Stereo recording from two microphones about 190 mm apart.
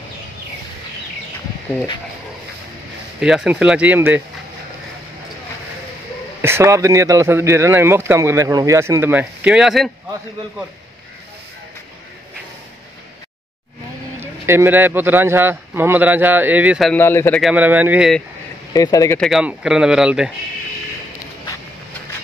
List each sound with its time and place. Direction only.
3.2 s speech: 5° right (ahead or behind)
6.4 s speech: 15° right (ahead or behind)
14.2 s speech: 15° right (ahead or behind)
16.9 s speech: 10° left (ahead or behind)
17.4 s speech: 5° right (ahead or behind)
18.7 s speech: 20° left (ahead or behind)
19.1 s speech: centre (ahead or behind)